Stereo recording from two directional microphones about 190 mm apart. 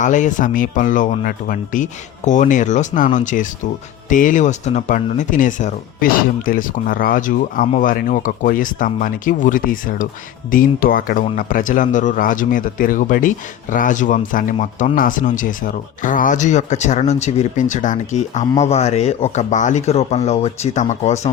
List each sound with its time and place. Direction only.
0.0 s speech: 40° left (ahead or behind)